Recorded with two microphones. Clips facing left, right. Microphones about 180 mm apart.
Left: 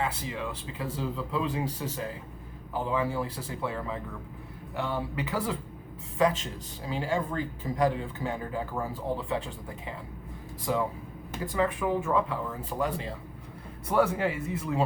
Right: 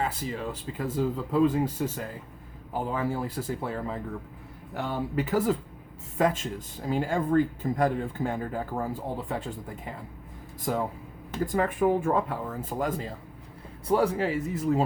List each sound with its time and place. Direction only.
0.1 s speech: 50° right (ahead or behind)
11.4 s speech: 50° right (ahead or behind)
13.8 s speech: 35° right (ahead or behind)